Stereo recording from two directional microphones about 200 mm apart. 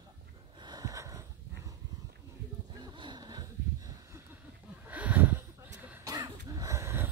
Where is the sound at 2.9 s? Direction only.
20° right (ahead or behind).